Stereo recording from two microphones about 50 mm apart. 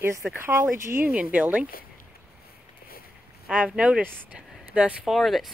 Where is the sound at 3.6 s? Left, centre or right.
Centre.